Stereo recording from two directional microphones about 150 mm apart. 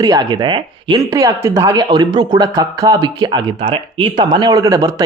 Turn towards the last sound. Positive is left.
turn(degrees=-25)  # may be behind; listen again after turning